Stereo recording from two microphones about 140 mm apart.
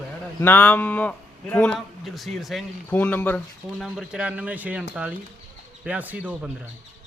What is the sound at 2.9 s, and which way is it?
Speech, 15° left (ahead or behind).